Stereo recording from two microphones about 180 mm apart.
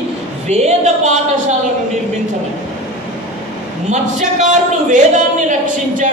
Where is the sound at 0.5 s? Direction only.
40° right (ahead or behind).